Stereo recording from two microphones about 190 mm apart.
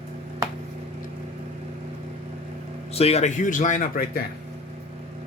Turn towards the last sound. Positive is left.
turn(degrees=50)  # may be behind; listen again after turning